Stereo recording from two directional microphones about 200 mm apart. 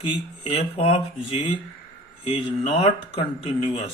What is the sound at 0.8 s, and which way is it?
Speech, 30° left (ahead or behind).